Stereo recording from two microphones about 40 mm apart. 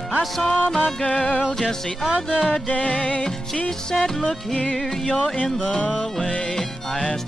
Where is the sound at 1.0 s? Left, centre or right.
Left.